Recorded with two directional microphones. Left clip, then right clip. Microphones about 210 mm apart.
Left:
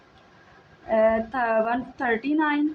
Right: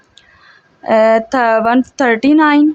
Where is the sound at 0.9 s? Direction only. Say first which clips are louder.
Right 11 dB; 55° right (ahead or behind).